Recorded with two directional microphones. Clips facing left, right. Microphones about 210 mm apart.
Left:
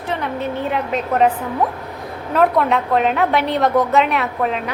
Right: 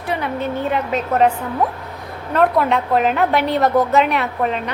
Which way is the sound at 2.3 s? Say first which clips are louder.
Even; centre (ahead or behind).